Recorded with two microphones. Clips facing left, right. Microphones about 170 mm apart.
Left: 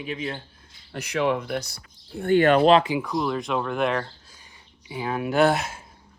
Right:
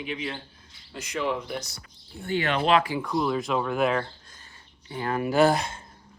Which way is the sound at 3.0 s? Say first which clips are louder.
Even; centre (ahead or behind).